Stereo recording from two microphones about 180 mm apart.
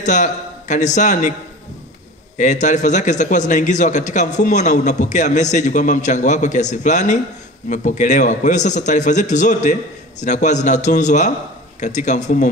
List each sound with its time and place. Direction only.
0.0 s a man's voice: 45° left (ahead or behind)
2.3 s a man's voice: 45° left (ahead or behind)